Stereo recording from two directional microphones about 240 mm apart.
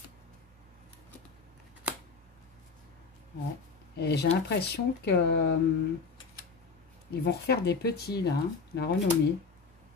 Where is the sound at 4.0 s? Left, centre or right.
Left.